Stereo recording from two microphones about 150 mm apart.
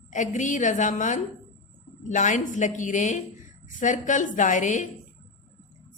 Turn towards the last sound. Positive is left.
turn(degrees=55)  # may be behind; listen again after turning